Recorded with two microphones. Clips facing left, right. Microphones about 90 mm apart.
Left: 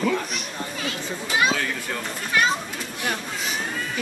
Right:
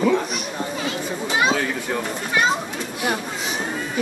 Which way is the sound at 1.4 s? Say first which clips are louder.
Right 3 dB; 25° right (ahead or behind).